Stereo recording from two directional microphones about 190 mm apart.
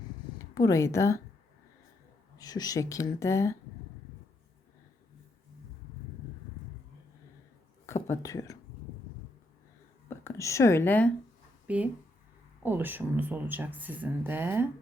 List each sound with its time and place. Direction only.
0.5 s a woman's voice: 20° left (ahead or behind)
2.4 s a woman's voice: 20° left (ahead or behind)
7.9 s speech: 15° left (ahead or behind)
10.1 s speech: 15° left (ahead or behind)
11.7 s speech: 5° right (ahead or behind)